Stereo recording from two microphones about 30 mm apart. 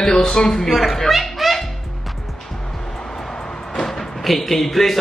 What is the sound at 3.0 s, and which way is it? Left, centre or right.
Music, centre.